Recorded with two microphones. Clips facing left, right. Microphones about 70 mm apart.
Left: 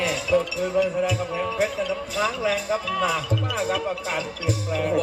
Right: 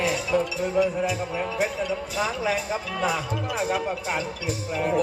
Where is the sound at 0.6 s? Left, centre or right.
Right.